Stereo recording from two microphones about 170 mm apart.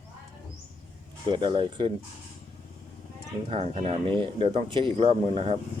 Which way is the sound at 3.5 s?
35° right (ahead or behind).